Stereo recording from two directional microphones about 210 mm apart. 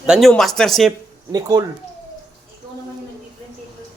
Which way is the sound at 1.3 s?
20° right (ahead or behind).